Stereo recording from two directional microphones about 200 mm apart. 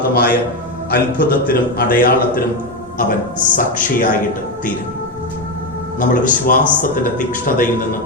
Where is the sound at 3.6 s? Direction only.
40° left (ahead or behind).